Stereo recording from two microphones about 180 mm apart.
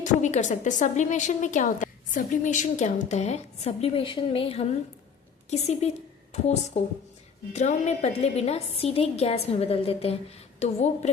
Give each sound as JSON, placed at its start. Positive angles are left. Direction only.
{"t": 0.0, "sound": "a woman's voice", "side_deg": 40}